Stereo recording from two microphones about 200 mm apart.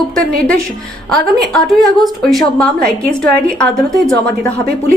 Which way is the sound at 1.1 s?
Centre (ahead or behind).